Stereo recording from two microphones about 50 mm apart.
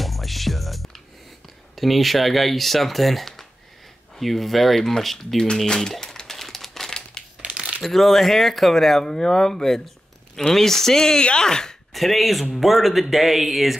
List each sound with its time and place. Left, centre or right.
0.0 s music: centre
1.8 s speech: centre
5.7 s crumpling: centre
7.4 s crumpling: right
7.8 s speech: centre
11.9 s speech: centre